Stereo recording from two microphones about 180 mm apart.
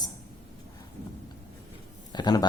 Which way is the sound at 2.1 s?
25° left (ahead or behind).